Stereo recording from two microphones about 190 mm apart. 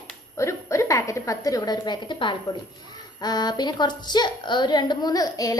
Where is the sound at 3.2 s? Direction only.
20° left (ahead or behind).